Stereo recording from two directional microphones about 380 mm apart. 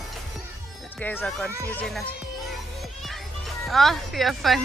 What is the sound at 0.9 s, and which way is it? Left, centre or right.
Speech, centre.